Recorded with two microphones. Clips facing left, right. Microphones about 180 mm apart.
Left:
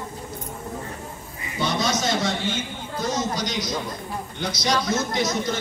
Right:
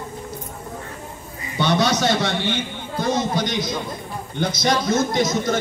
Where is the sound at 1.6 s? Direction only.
65° right (ahead or behind); by 5.5 s 50° right (ahead or behind).